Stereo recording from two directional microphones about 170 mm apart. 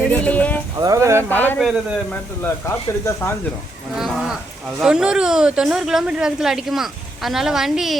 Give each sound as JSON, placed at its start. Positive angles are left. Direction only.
{"t": 0.1, "sound": "a sound", "side_deg": 10}
{"t": 0.8, "sound": "speech", "side_deg": -20}
{"t": 1.3, "sound": "speech", "side_deg": 10}
{"t": 1.5, "sound": "speech", "side_deg": 0}
{"t": 2.4, "sound": "speech", "side_deg": 15}
{"t": 3.9, "sound": "speech", "side_deg": 0}